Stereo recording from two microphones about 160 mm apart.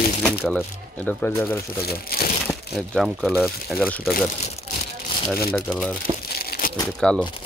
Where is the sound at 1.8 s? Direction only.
75° left (ahead or behind).